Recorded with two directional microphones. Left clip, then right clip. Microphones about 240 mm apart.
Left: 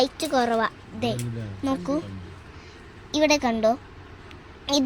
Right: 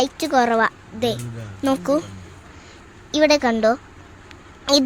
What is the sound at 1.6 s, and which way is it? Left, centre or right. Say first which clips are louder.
Child singing: right 7 dB; right.